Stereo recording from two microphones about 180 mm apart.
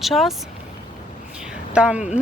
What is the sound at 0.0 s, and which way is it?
Speech, centre (ahead or behind).